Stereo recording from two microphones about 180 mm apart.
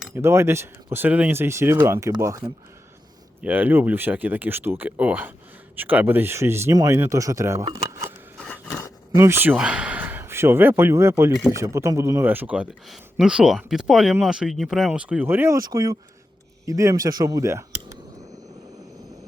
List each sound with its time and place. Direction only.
0.1 s speech: 15° right (ahead or behind)
8.4 s a sound: 5° left (ahead or behind)
9.1 s a man's voice: 15° right (ahead or behind)